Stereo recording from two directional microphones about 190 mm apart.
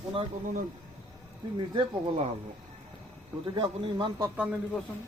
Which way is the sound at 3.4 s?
25° right (ahead or behind).